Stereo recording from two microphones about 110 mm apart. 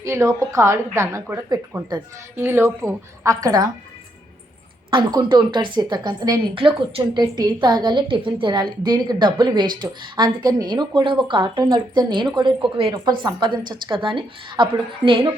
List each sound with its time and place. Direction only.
0.0 s a woman's voice: 25° right (ahead or behind)
1.7 s a woman's voice: 40° right (ahead or behind)
2.4 s a woman's voice: 25° right (ahead or behind)
4.9 s a woman's voice: 45° right (ahead or behind)
6.5 s a woman's voice: 55° right (ahead or behind)